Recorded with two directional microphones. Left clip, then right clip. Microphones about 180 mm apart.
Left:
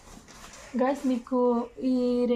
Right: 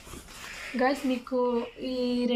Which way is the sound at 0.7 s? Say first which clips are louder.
Even; 45° left (ahead or behind).